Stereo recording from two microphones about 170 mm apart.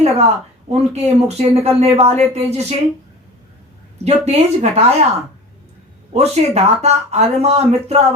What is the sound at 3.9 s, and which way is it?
Speech, 40° right (ahead or behind).